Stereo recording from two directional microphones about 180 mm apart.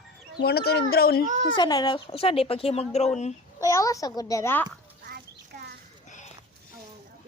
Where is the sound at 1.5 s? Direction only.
25° left (ahead or behind); by 3.3 s 40° left (ahead or behind).